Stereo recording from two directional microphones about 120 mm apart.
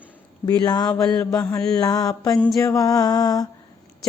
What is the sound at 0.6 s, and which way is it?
Mantra, 35° left (ahead or behind).